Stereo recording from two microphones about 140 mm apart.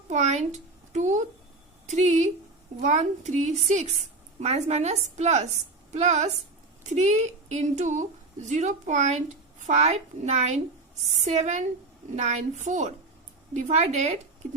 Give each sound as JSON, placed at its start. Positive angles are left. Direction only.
{"t": 0.1, "sound": "a woman's voice", "side_deg": -55}